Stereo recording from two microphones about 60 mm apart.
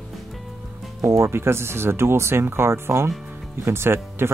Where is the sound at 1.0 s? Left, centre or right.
Right.